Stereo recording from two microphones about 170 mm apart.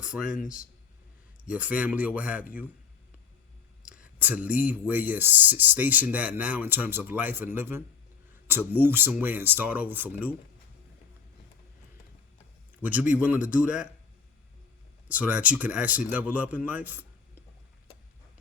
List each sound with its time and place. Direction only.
0.0 s speech: 5° right (ahead or behind)
0.3 s speech: 50° left (ahead or behind)
1.5 s speech: 5° right (ahead or behind)
3.8 s speech: 5° right (ahead or behind)
12.8 s a man's voice: 10° right (ahead or behind)
15.1 s speech: 10° right (ahead or behind)